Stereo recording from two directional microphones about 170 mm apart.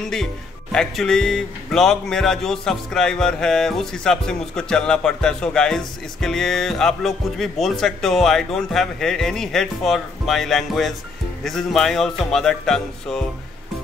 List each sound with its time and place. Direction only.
0.0 s speech: 5° left (ahead or behind)